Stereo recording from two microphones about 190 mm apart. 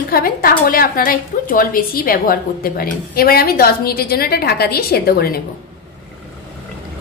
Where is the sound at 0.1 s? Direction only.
50° left (ahead or behind).